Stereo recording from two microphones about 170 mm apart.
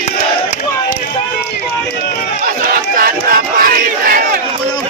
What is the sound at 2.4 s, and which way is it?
Crowd, 55° right (ahead or behind).